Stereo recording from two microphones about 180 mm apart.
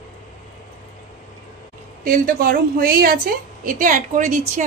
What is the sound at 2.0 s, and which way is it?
A woman's voice, 50° right (ahead or behind).